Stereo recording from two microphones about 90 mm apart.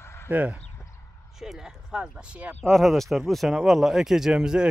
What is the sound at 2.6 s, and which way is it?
Speech, centre (ahead or behind).